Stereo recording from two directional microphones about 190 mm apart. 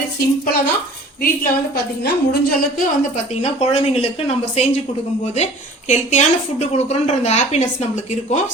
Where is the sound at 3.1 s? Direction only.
35° left (ahead or behind).